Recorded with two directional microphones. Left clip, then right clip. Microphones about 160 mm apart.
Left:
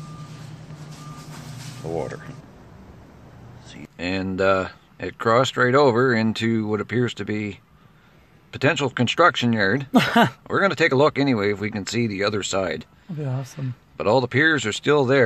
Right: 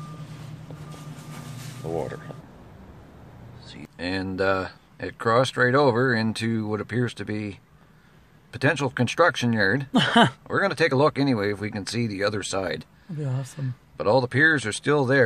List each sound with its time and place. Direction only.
1.8 s speech: centre (ahead or behind)
3.7 s speech: 5° left (ahead or behind)
9.9 s speech: 45° left (ahead or behind)
10.5 s speech: 5° left (ahead or behind)
13.2 s speech: 30° left (ahead or behind)
13.6 s speech: 5° left (ahead or behind)